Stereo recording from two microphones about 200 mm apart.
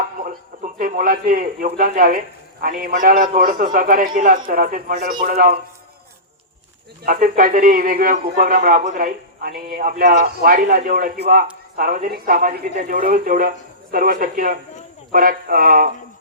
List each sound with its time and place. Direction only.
0.2 s a man's voice: 40° right (ahead or behind)
7.0 s a man's voice: 45° right (ahead or behind)